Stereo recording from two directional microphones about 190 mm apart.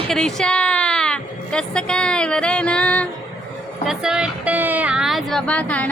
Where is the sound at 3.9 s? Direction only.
5° right (ahead or behind).